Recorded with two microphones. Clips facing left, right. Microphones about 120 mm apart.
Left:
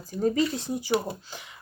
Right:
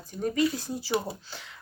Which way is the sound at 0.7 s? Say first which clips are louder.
Left 3 dB; 15° left (ahead or behind).